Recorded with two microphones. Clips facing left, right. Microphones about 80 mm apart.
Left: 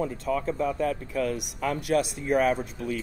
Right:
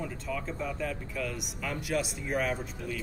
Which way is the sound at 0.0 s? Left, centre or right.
Left.